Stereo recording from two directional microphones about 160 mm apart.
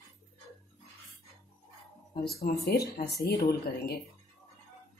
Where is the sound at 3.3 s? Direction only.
90° left.